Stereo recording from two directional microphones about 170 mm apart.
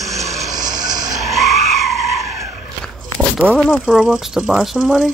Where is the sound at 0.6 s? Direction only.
50° right (ahead or behind).